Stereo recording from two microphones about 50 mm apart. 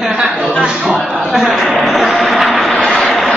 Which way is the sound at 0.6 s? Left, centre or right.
Centre.